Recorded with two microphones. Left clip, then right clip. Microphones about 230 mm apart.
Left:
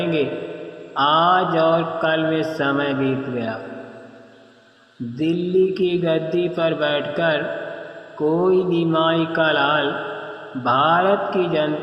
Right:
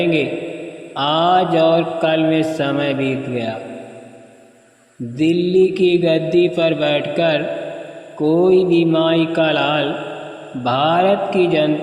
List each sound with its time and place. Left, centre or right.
0.0 s mantra: right
5.2 s mantra: right